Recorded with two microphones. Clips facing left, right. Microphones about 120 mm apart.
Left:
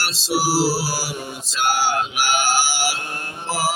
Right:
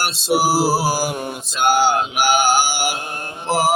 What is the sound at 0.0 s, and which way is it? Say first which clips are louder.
Music: right 4 dB; 55° right (ahead or behind).